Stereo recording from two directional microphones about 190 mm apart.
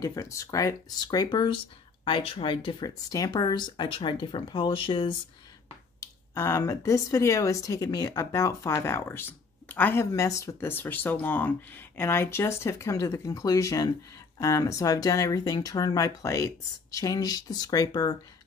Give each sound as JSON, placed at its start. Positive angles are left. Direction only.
{"t": 0.0, "sound": "speech", "side_deg": 15}
{"t": 5.9, "sound": "speech", "side_deg": 15}